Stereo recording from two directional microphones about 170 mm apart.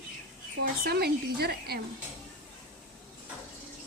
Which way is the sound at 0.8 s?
65° right (ahead or behind).